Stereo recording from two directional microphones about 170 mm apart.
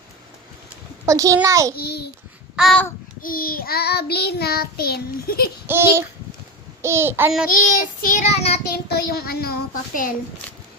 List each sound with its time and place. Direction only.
1.0 s a child's voice: 20° right (ahead or behind)
1.7 s a child's voice: 70° left (ahead or behind)
2.6 s babbling: centre (ahead or behind)
3.2 s child singing: 60° left (ahead or behind)
5.6 s a child's voice: 15° right (ahead or behind)
7.4 s child singing: 55° left (ahead or behind); by 8.6 s 40° left (ahead or behind)
8.7 s child singing: 65° left (ahead or behind)